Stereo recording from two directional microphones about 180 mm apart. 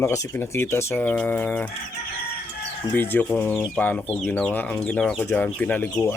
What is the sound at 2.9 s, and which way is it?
Speech, 10° left (ahead or behind).